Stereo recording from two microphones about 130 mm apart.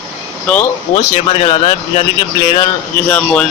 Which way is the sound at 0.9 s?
40° left (ahead or behind).